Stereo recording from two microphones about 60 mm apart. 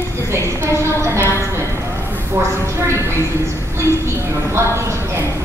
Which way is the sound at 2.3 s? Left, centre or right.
Right.